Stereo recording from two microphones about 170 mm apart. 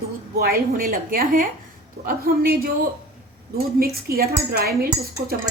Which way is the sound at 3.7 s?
65° right (ahead or behind).